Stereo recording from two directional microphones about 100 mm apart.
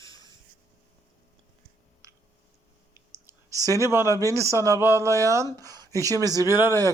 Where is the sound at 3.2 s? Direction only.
35° right (ahead or behind).